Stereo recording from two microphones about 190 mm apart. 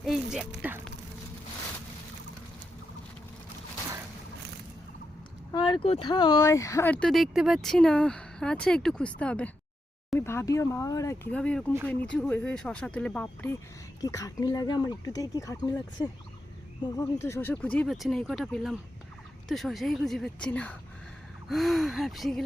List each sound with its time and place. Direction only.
0.0 s speech: centre (ahead or behind)
5.5 s speech: 25° left (ahead or behind); by 13.6 s 5° left (ahead or behind)
14.0 s speech: 15° left (ahead or behind); by 22.4 s centre (ahead or behind)